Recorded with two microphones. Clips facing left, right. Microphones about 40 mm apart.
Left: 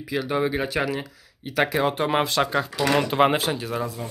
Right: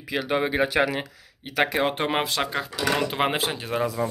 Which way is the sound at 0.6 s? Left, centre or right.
Right.